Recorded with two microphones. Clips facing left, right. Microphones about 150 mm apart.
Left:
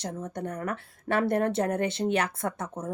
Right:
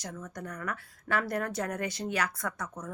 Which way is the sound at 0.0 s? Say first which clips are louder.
Left 7 dB; 30° left (ahead or behind).